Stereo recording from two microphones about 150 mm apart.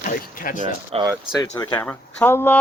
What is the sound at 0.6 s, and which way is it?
Speech, 35° right (ahead or behind).